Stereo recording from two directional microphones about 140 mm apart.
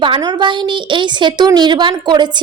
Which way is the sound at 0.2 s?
30° right (ahead or behind).